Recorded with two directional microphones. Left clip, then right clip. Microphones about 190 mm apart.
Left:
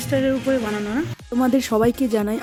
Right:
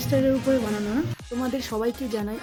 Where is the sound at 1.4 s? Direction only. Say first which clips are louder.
Left 9 dB; 55° left (ahead or behind).